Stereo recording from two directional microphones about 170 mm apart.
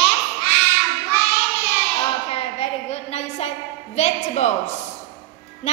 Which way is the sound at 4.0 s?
45° left (ahead or behind).